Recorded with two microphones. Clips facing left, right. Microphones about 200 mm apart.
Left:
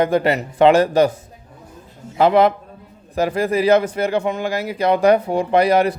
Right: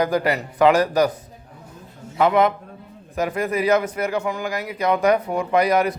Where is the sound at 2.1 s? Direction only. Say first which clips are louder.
Left 4 dB; 30° left (ahead or behind).